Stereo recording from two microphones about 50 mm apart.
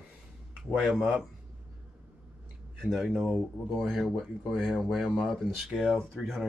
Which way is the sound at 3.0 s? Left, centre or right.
Centre.